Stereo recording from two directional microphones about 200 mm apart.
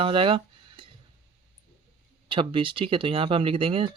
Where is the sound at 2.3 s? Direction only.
25° right (ahead or behind).